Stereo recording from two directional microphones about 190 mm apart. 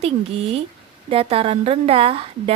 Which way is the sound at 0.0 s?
30° right (ahead or behind).